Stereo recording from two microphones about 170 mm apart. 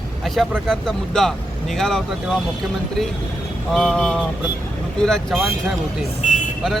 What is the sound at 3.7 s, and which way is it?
Speech, centre (ahead or behind).